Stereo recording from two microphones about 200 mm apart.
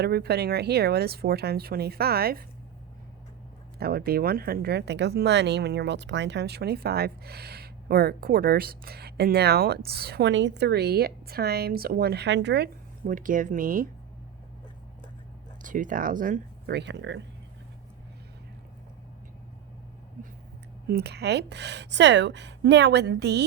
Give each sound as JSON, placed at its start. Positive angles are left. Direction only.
{"t": 0.0, "sound": "speech", "side_deg": -55}
{"t": 3.8, "sound": "speech", "side_deg": -50}
{"t": 15.6, "sound": "speech", "side_deg": -40}
{"t": 20.8, "sound": "speech", "side_deg": -55}